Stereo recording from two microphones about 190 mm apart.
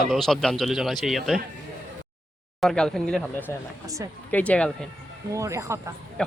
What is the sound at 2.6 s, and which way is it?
Speech, centre (ahead or behind).